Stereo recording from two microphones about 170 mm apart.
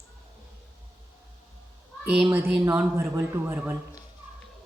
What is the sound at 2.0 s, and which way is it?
A woman's voice, 5° right (ahead or behind).